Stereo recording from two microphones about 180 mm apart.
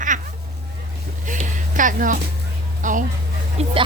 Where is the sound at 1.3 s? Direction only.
45° right (ahead or behind).